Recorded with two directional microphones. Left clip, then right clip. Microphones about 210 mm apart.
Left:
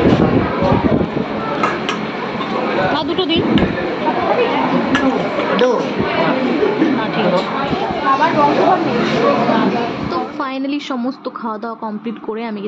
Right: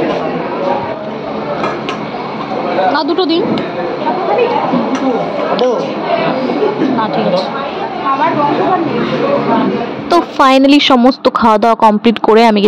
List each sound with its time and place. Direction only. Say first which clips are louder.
10.1 s a woman's voice: right 13 dB; 45° right (ahead or behind)